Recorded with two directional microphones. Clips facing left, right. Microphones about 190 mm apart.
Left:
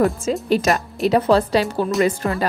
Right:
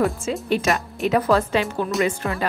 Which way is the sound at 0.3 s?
40° left (ahead or behind).